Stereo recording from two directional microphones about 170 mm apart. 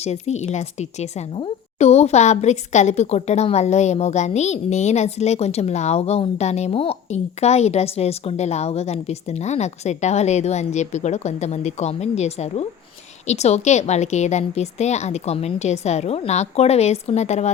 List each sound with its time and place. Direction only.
0.0 s a woman's voice: 40° left (ahead or behind)